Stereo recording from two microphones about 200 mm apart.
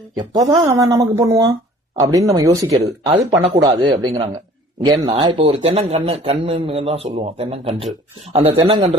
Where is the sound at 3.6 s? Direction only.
20° right (ahead or behind).